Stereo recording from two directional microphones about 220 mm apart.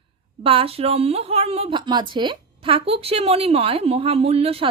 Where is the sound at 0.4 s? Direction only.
25° right (ahead or behind).